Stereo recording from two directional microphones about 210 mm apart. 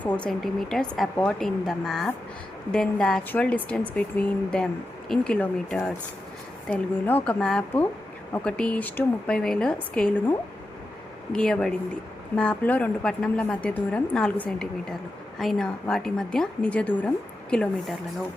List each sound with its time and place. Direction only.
0.0 s a woman's voice: 5° left (ahead or behind)